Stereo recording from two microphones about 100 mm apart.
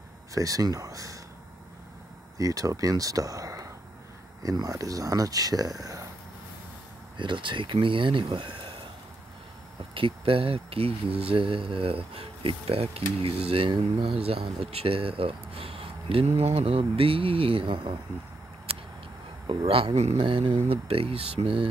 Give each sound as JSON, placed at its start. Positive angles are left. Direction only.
{"t": 0.3, "sound": "speech", "side_deg": -35}
{"t": 2.3, "sound": "speech", "side_deg": -35}
{"t": 7.2, "sound": "speech", "side_deg": -55}
{"t": 9.9, "sound": "speech", "side_deg": -65}
{"t": 19.4, "sound": "speech", "side_deg": -65}
{"t": 20.0, "sound": "speech", "side_deg": -80}